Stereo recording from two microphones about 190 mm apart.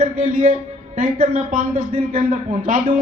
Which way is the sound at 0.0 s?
35° right (ahead or behind).